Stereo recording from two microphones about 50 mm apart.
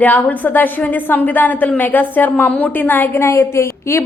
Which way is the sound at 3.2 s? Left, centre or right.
Left.